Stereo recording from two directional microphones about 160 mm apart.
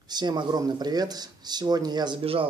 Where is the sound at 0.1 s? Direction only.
25° right (ahead or behind).